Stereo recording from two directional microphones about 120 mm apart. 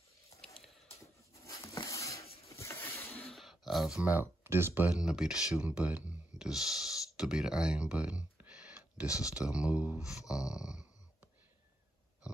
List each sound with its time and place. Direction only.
1.0 s a sound: 25° left (ahead or behind)
2.5 s patter: 25° left (ahead or behind)
3.2 s a sound: centre (ahead or behind)
4.0 s speech: 15° right (ahead or behind)
9.0 s speech: 30° left (ahead or behind)
9.3 s speech: 10° right (ahead or behind)